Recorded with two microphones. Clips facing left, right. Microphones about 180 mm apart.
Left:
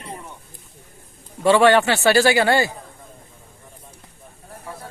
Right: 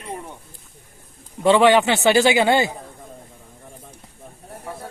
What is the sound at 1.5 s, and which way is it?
A man's voice, 15° right (ahead or behind).